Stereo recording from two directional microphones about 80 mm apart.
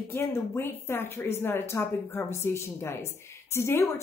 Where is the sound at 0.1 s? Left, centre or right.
Left.